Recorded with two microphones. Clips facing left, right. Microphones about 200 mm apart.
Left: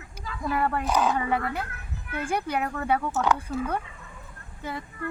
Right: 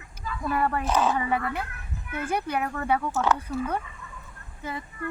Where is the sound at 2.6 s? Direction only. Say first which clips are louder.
Even; centre (ahead or behind).